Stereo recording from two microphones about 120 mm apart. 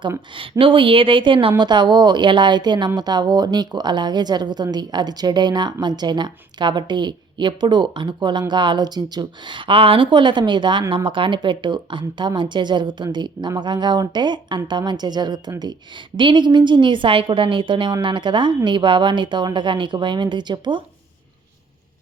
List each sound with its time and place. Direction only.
0.6 s a woman's voice: 45° right (ahead or behind)